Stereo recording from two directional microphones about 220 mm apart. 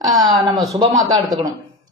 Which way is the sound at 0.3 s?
20° right (ahead or behind).